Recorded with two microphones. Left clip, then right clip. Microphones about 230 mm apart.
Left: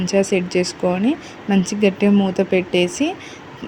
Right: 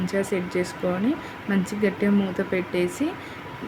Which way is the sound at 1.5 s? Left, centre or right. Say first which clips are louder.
Left 7 dB; left.